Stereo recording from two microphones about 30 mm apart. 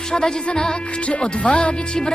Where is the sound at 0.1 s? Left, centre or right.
Left.